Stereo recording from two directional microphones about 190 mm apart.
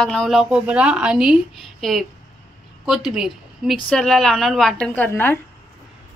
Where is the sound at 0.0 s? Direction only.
5° left (ahead or behind).